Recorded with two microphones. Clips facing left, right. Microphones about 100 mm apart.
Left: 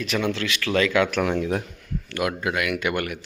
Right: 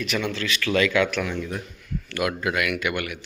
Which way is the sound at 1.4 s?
70° left (ahead or behind).